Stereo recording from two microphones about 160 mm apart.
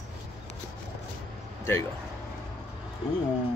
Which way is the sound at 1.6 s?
15° left (ahead or behind).